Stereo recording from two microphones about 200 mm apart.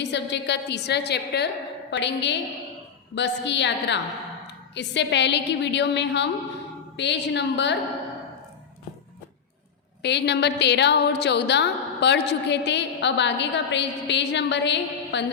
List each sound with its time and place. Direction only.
0.0 s a woman's voice: 60° left (ahead or behind)
10.0 s a woman's voice: 60° left (ahead or behind)